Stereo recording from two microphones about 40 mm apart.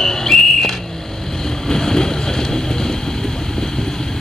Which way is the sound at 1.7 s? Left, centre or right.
Centre.